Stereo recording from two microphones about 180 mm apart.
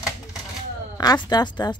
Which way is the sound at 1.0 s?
20° left (ahead or behind).